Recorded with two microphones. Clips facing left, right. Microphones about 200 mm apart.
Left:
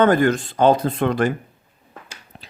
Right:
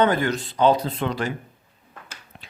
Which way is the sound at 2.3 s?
35° left (ahead or behind).